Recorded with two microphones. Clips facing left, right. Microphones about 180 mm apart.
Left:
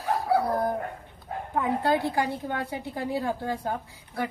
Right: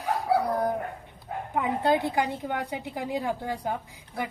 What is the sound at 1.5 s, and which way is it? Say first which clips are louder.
A woman's voice: even; 20° right (ahead or behind).